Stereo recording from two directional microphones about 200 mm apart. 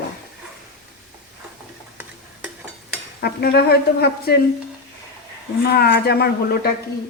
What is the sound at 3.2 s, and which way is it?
Speech, 50° left (ahead or behind).